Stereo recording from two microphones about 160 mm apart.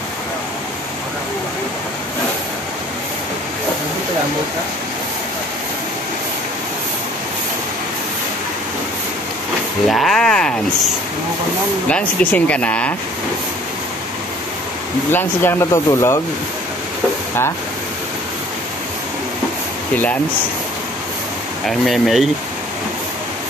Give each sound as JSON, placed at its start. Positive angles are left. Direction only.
{"t": 9.8, "sound": "speech", "side_deg": 0}
{"t": 11.9, "sound": "speech", "side_deg": 10}
{"t": 15.0, "sound": "speech", "side_deg": 15}
{"t": 21.6, "sound": "speech", "side_deg": 0}